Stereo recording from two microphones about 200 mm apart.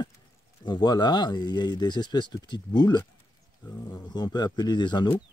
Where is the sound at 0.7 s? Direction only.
20° left (ahead or behind).